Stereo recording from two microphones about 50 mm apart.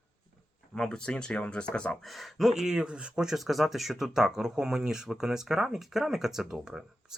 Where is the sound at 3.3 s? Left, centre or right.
Centre.